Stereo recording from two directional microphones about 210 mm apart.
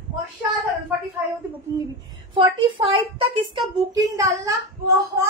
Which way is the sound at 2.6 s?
25° right (ahead or behind).